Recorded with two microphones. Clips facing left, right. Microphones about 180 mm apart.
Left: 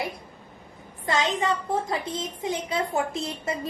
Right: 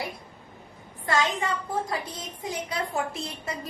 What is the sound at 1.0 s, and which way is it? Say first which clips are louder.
A child's voice: left 2 dB; 20° left (ahead or behind).